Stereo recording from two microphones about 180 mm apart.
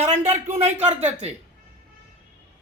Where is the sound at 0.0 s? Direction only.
40° right (ahead or behind).